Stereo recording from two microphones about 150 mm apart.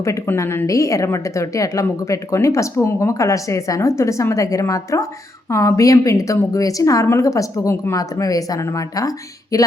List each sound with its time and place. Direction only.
0.0 s a woman's voice: 20° left (ahead or behind)